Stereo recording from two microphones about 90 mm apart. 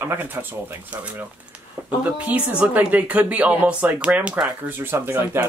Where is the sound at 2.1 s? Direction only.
15° right (ahead or behind).